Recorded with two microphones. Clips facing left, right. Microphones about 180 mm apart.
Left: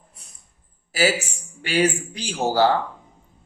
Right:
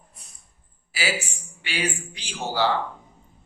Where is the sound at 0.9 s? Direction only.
45° left (ahead or behind).